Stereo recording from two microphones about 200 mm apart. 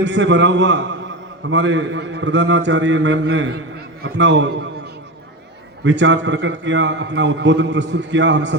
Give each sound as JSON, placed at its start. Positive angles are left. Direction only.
{"t": 0.0, "sound": "a man's voice", "side_deg": -65}
{"t": 5.8, "sound": "a man's voice", "side_deg": -65}